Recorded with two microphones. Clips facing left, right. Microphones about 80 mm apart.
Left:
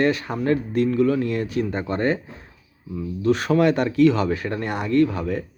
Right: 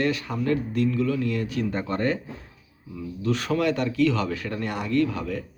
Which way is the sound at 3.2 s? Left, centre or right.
Left.